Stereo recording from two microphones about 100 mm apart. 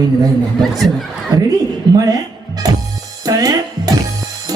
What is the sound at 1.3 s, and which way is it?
Speech, 45° right (ahead or behind).